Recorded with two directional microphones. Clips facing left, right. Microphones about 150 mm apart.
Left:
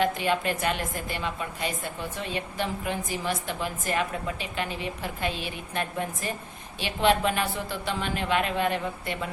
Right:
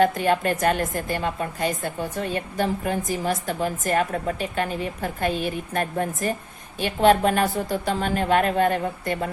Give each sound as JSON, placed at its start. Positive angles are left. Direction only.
{"t": 0.0, "sound": "a woman's voice", "side_deg": -45}